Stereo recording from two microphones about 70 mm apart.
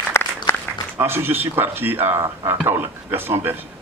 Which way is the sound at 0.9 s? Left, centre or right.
Right.